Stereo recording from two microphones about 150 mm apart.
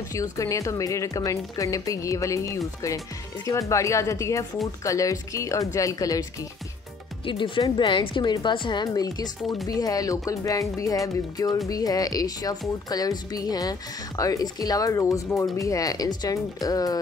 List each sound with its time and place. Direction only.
0.1 s speech: 20° left (ahead or behind)
7.2 s a woman's voice: 35° left (ahead or behind)